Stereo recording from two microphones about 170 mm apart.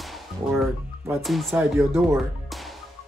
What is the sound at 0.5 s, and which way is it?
Speech, 15° right (ahead or behind).